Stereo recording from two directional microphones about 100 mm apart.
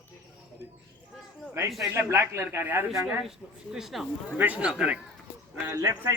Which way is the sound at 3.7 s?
5° right (ahead or behind).